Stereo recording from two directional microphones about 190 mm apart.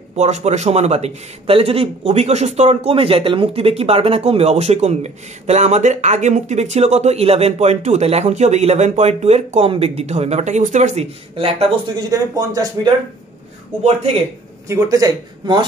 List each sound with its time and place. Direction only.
0.1 s a man's voice: 35° right (ahead or behind); by 12.9 s 20° right (ahead or behind)
14.7 s speech: 15° right (ahead or behind)